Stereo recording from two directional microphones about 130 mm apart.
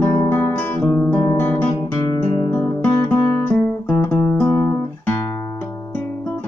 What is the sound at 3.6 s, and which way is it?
Guitar, 15° left (ahead or behind).